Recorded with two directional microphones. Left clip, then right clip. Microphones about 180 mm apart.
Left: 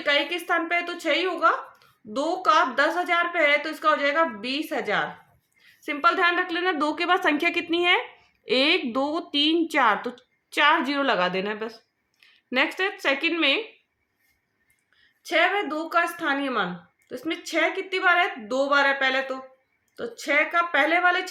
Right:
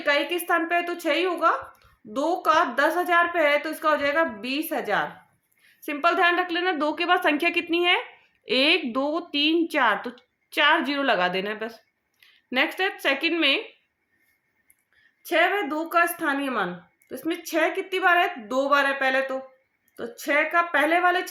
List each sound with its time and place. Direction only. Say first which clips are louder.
0.0 s a woman's voice: even; 20° right (ahead or behind); by 13.6 s centre (ahead or behind)
15.2 s a woman's voice: even; 20° right (ahead or behind)